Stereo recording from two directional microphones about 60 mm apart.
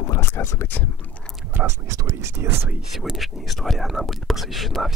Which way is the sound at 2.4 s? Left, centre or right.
Right.